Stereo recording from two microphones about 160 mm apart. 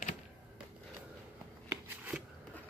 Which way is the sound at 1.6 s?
10° right (ahead or behind).